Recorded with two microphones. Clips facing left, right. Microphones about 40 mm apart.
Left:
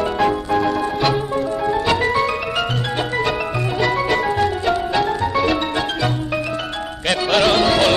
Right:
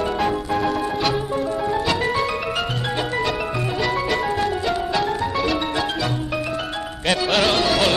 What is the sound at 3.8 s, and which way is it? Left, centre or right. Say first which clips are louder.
Music: left 4 dB; centre.